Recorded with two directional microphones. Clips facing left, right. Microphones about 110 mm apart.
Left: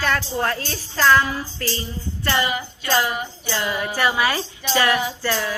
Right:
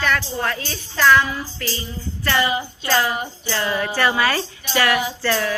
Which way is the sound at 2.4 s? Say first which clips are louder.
Right 3 dB; 25° right (ahead or behind).